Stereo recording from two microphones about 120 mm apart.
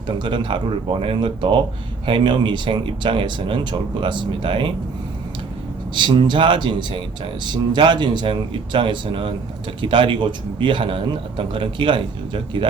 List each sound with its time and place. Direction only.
0.2 s a man's voice: 45° right (ahead or behind)
5.9 s a man's voice: 40° right (ahead or behind)